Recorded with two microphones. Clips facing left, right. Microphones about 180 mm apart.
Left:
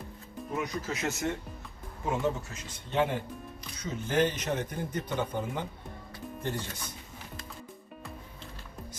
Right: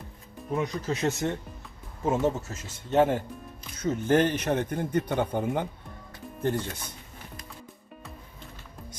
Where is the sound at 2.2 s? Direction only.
45° right (ahead or behind).